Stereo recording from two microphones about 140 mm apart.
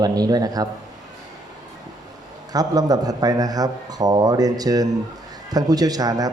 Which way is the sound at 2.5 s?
25° right (ahead or behind).